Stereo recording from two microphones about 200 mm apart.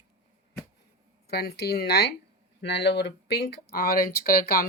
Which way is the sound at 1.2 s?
55° left (ahead or behind).